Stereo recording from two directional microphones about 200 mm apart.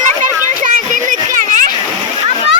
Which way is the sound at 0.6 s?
40° right (ahead or behind).